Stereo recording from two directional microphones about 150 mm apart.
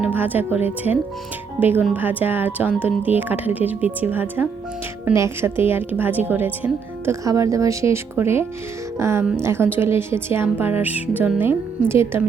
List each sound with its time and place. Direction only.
0.0 s a woman's voice: 10° right (ahead or behind)